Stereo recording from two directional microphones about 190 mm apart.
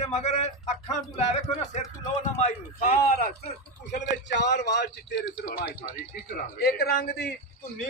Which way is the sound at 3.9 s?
65° left (ahead or behind).